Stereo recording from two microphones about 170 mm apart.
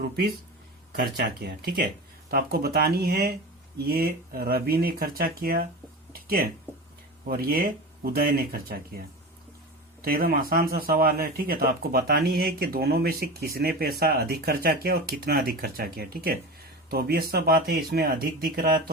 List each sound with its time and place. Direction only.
0.9 s speech: 65° right (ahead or behind)
10.0 s speech: 60° right (ahead or behind)